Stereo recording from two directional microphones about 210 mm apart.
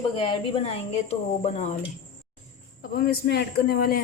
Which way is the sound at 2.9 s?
45° left (ahead or behind).